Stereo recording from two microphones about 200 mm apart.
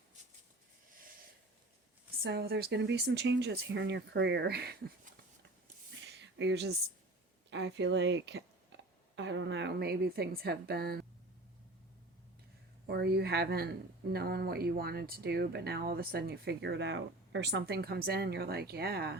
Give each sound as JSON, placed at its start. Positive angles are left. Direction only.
{"t": 2.2, "sound": "speech", "side_deg": -55}
{"t": 6.0, "sound": "a sound", "side_deg": -60}
{"t": 7.5, "sound": "speech", "side_deg": -60}
{"t": 12.9, "sound": "speech", "side_deg": -55}